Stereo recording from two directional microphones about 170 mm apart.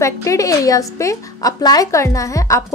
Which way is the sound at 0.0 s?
20° left (ahead or behind).